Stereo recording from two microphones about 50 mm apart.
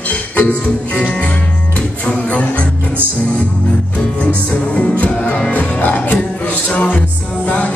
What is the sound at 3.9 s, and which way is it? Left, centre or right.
Music, left.